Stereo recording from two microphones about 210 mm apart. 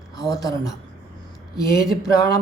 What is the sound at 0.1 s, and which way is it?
Speech, 15° left (ahead or behind).